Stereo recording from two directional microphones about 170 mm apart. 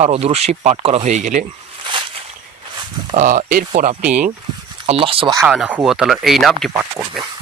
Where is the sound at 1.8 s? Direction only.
30° right (ahead or behind).